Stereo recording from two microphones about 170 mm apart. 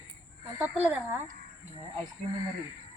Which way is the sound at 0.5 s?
10° right (ahead or behind).